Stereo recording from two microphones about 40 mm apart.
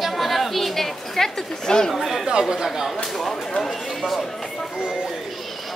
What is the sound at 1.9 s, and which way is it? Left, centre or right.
Speech, centre.